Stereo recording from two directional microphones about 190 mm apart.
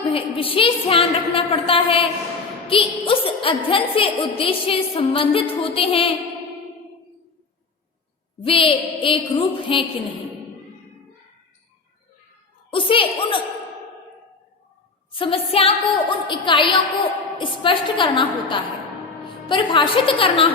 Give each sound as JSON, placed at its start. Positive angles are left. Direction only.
{"t": 0.1, "sound": "a woman's voice", "side_deg": 30}
{"t": 8.4, "sound": "a woman's voice", "side_deg": 25}
{"t": 12.7, "sound": "a sound", "side_deg": 25}
{"t": 15.2, "sound": "a woman's voice", "side_deg": 30}